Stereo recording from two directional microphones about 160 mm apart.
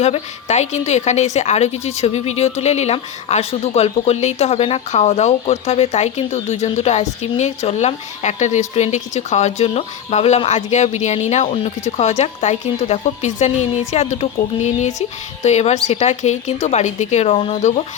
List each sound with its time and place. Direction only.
0.0 s speech: 45° left (ahead or behind)